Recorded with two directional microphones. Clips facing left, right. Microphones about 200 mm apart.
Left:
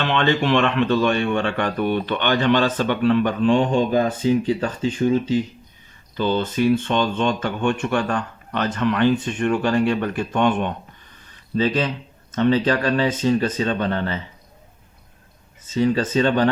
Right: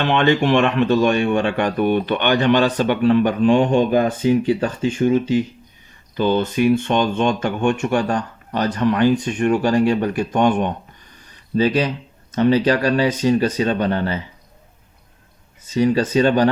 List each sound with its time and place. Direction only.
0.0 s speech: 50° right (ahead or behind)
3.8 s speech: 20° right (ahead or behind)
6.1 s speech: 50° right (ahead or behind)
16.0 s speech: 40° right (ahead or behind)